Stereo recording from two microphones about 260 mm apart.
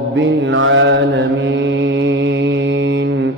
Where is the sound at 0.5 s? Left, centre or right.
Right.